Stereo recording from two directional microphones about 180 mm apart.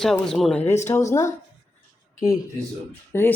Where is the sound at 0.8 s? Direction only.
40° left (ahead or behind).